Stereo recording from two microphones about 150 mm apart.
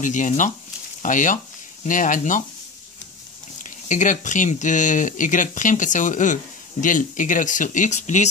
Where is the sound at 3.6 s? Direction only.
60° left (ahead or behind).